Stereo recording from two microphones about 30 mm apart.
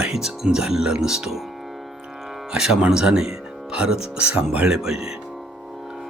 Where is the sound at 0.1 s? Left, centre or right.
Centre.